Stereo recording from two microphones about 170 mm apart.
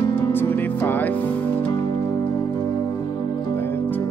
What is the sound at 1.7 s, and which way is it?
Music, 20° left (ahead or behind).